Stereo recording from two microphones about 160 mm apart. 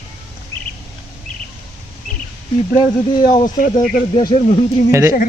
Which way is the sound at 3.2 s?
55° left (ahead or behind).